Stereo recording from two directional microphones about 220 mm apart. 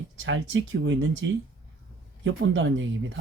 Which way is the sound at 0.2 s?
55° right (ahead or behind).